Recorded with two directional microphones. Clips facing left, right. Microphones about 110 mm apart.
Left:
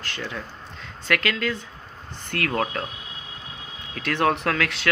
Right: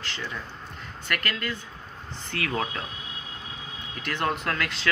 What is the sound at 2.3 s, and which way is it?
Speech, 60° left (ahead or behind).